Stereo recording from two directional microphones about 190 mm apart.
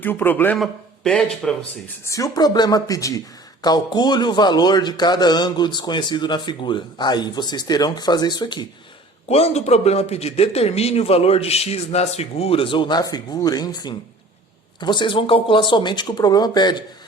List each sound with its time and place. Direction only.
0.0 s speech: 10° left (ahead or behind)
2.0 s a man's voice: 15° left (ahead or behind)
9.3 s a man's voice: 35° left (ahead or behind)